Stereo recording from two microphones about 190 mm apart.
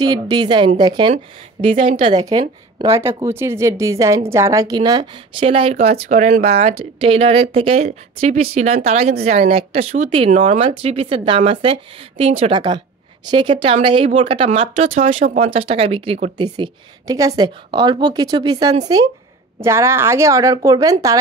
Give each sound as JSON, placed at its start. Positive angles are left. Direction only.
{"t": 0.0, "sound": "a woman's voice", "side_deg": -20}